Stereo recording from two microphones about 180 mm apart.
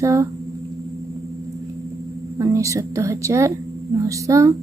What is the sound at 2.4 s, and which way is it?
A woman's voice, 15° right (ahead or behind).